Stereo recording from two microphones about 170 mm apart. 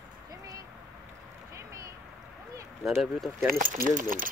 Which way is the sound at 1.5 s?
20° right (ahead or behind).